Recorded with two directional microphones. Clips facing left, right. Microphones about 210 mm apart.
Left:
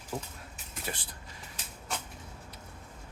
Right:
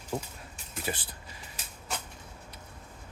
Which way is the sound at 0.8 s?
5° right (ahead or behind).